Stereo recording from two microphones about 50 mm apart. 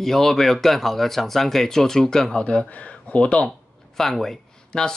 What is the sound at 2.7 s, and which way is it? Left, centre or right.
Speech, left.